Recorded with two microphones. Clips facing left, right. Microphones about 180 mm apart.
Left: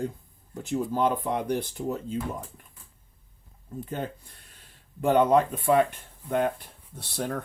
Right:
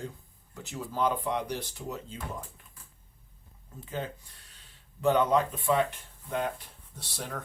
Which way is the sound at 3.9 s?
50° left (ahead or behind).